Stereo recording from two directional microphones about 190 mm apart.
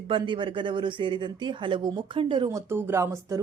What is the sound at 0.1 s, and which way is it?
Speech, 25° right (ahead or behind).